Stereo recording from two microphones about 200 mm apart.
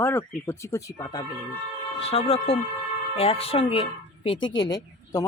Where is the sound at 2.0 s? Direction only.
30° left (ahead or behind).